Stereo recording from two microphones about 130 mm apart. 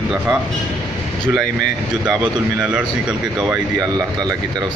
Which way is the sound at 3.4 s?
5° right (ahead or behind).